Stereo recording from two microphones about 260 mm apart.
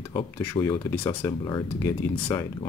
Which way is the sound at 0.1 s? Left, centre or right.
Centre.